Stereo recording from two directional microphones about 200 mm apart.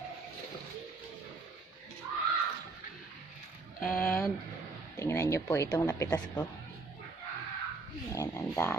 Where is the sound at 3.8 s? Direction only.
5° left (ahead or behind).